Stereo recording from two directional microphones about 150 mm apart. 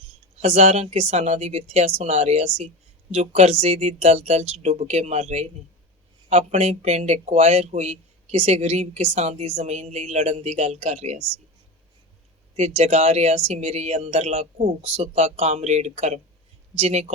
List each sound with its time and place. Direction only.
0.3 s speech: 45° right (ahead or behind)
12.5 s speech: 45° right (ahead or behind)